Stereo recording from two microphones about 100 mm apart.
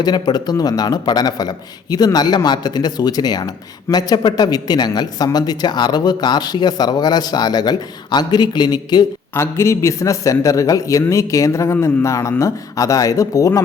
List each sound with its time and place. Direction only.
0.0 s speech: 45° left (ahead or behind)
9.3 s a man's voice: 30° left (ahead or behind)